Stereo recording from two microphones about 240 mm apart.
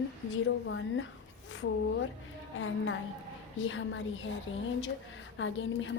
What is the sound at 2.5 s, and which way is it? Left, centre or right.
A woman's voice, left.